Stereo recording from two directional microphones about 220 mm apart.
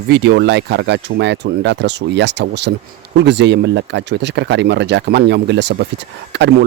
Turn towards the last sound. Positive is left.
turn(degrees=-50)  # may be behind; listen again after turning